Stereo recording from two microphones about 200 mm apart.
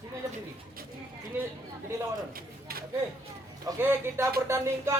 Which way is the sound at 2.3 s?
45° right (ahead or behind).